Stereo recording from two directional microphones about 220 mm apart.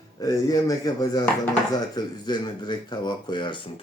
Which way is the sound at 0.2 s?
15° left (ahead or behind).